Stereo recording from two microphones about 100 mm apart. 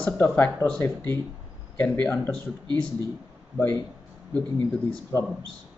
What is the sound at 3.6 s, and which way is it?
Speech, 20° left (ahead or behind).